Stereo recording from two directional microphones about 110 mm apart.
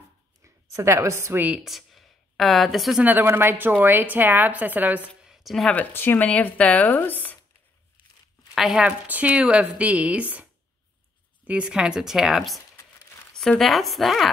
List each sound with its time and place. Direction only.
0.4 s speech: 25° right (ahead or behind)
1.6 s a woman's voice: centre (ahead or behind)
3.0 s a woman's voice: 15° right (ahead or behind)
5.2 s a sound: centre (ahead or behind)
5.7 s speech: 15° left (ahead or behind)
8.5 s a woman's voice: 5° right (ahead or behind)